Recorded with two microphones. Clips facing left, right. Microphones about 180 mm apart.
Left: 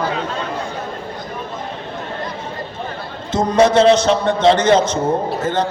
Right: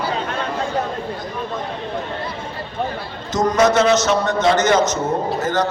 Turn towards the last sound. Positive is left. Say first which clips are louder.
# left 1 dB
turn(degrees=30)  # may be behind; listen again after turning